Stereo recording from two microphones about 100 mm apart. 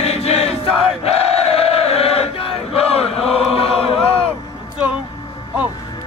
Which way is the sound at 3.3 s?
75° left (ahead or behind).